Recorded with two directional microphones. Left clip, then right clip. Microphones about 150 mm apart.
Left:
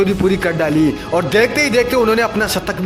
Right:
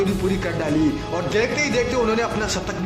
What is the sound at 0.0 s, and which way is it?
A man's voice, 45° left (ahead or behind).